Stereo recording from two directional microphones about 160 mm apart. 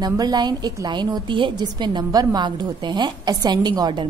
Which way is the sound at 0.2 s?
25° right (ahead or behind).